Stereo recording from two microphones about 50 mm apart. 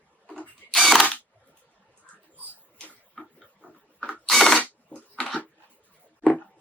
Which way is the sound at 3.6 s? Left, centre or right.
Right.